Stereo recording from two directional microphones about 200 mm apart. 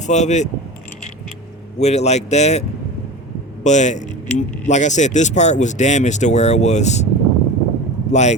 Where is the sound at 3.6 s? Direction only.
35° left (ahead or behind).